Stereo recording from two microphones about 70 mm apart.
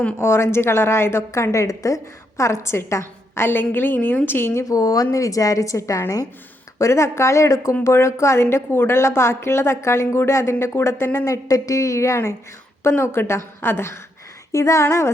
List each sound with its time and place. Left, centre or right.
0.2 s a woman's voice: left
4.7 s a woman's voice: left
11.3 s a woman's voice: left
14.5 s a woman's voice: left